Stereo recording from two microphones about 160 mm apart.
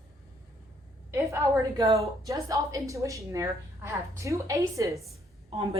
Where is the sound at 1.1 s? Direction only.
15° right (ahead or behind).